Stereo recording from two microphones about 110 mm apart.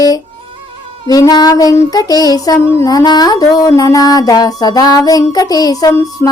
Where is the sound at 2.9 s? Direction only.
40° left (ahead or behind).